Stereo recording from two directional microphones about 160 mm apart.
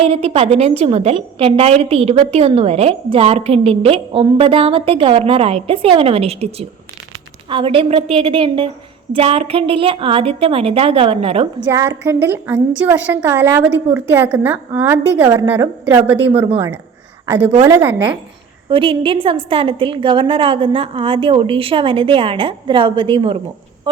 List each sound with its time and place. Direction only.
0.0 s a woman's voice: 40° right (ahead or behind)
11.6 s a woman's voice: 15° right (ahead or behind)
15.2 s a woman's voice: 25° right (ahead or behind)
16.0 s a woman's voice: 10° right (ahead or behind)
18.7 s a woman's voice: 35° right (ahead or behind)